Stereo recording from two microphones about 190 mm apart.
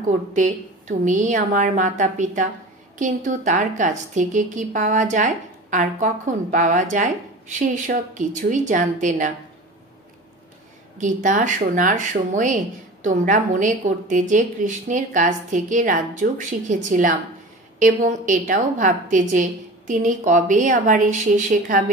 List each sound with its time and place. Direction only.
0.0 s a woman's voice: 40° right (ahead or behind)
11.0 s a woman's voice: 40° right (ahead or behind)